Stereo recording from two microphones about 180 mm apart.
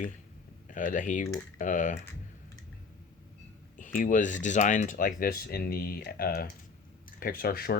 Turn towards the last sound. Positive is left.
turn(degrees=55)  # may be behind; listen again after turning